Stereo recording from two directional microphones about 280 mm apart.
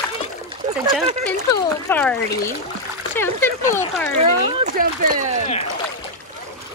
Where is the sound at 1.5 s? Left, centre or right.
Centre.